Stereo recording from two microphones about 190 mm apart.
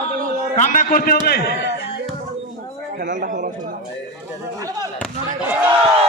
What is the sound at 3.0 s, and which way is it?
Speech, 45° right (ahead or behind).